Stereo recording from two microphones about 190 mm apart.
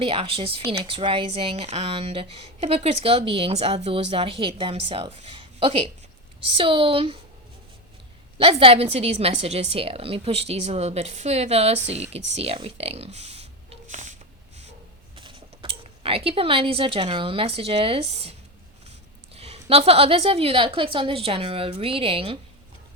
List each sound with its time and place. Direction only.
0.0 s speech: 30° right (ahead or behind)
8.4 s a woman's voice: 30° right (ahead or behind)
15.1 s speech: 30° right (ahead or behind)